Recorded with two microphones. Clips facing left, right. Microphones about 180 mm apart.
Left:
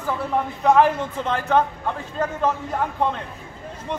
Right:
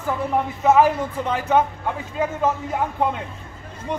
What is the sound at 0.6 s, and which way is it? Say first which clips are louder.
Speech: even; 5° right (ahead or behind).